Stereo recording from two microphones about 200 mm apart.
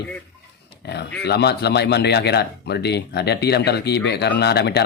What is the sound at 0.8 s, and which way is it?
Speech, 55° left (ahead or behind).